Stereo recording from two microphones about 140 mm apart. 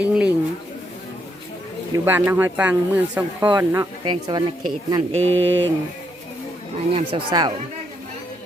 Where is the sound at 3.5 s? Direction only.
20° right (ahead or behind).